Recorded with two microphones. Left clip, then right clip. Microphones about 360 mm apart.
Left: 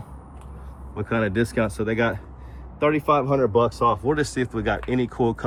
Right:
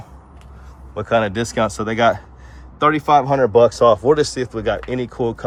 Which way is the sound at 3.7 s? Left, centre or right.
Right.